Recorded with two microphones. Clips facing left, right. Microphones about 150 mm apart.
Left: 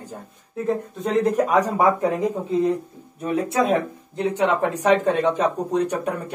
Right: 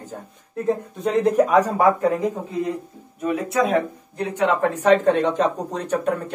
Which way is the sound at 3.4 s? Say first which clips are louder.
Even; 30° left (ahead or behind).